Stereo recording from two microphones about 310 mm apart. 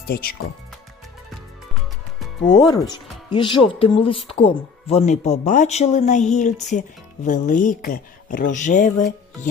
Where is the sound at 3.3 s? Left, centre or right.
Centre.